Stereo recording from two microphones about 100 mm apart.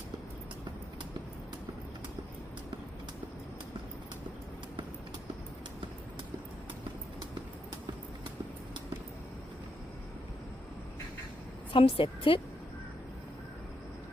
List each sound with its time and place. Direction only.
11.7 s a woman's voice: 65° left (ahead or behind)